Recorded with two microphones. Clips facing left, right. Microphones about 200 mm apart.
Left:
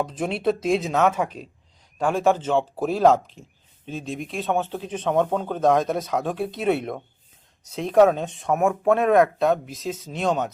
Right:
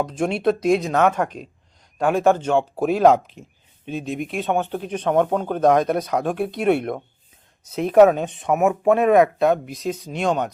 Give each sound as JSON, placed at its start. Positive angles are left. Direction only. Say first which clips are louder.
{"t": 0.0, "sound": "speech", "louder": "right 3 dB", "side_deg": 5}